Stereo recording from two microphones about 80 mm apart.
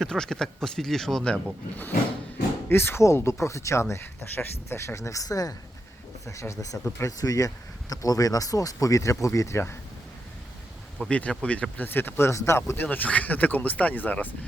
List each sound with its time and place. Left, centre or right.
0.0 s speech: centre
2.6 s speech: left
11.1 s speech: centre
11.9 s speech: left